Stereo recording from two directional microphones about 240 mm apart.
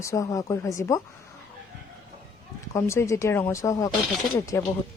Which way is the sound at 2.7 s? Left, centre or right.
Centre.